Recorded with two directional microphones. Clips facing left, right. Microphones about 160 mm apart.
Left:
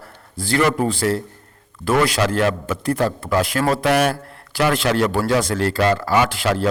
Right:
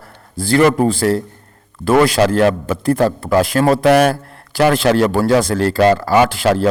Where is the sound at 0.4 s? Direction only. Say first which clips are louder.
Right 6 dB; 40° right (ahead or behind).